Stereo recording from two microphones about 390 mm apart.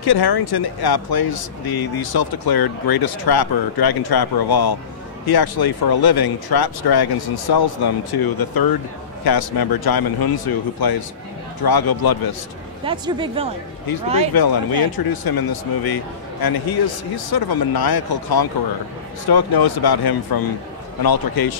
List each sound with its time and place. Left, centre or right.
0.0 s speech: left
12.8 s speech: centre
14.3 s speech: left